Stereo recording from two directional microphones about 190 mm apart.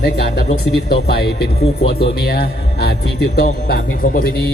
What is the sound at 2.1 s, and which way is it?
A man's voice, 55° left (ahead or behind).